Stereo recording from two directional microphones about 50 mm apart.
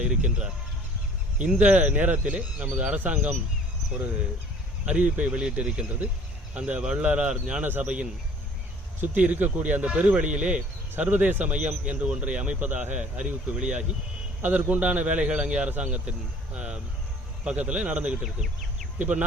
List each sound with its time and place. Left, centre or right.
0.0 s speech: right
1.5 s speech: right
4.9 s speech: right
7.0 s speech: right
15.3 s speech: right